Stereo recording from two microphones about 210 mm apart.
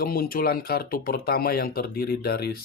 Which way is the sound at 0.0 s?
45° left (ahead or behind).